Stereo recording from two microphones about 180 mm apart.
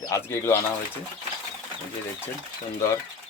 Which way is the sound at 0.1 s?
15° left (ahead or behind).